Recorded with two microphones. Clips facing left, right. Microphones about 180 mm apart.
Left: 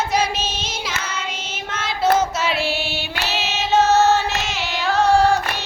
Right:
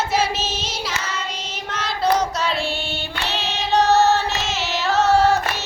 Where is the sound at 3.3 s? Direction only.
5° left (ahead or behind).